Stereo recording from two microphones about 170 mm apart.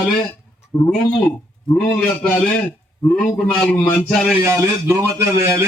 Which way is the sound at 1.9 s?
5° left (ahead or behind).